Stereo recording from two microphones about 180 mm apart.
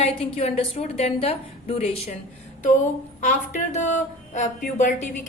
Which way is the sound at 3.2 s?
40° left (ahead or behind).